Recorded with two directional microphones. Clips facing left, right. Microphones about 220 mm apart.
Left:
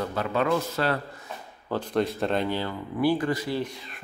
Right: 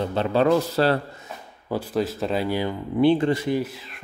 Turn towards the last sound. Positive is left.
turn(degrees=-5)  # may be behind; listen again after turning